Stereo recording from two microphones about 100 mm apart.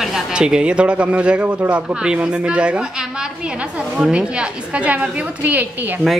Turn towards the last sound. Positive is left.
turn(degrees=-15)  # may be behind; listen again after turning